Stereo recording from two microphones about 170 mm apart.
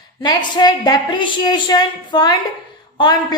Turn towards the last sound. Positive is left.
turn(degrees=25)  # may be behind; listen again after turning